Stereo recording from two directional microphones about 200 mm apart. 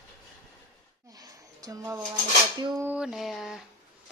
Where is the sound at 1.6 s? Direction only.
15° right (ahead or behind).